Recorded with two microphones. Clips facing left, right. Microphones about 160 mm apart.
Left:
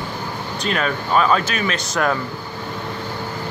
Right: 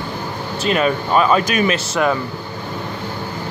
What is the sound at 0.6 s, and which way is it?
Speech, 5° right (ahead or behind).